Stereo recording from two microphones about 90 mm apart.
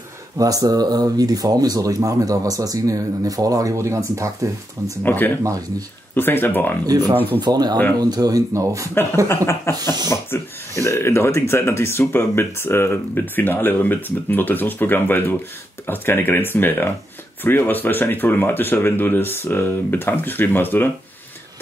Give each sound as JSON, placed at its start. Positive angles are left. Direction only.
{"t": 0.4, "sound": "speech", "side_deg": -40}
{"t": 5.0, "sound": "speech", "side_deg": 20}
{"t": 5.4, "sound": "speech", "side_deg": -40}
{"t": 6.1, "sound": "speech", "side_deg": 25}
{"t": 7.3, "sound": "speech", "side_deg": -50}
{"t": 9.7, "sound": "speech", "side_deg": 30}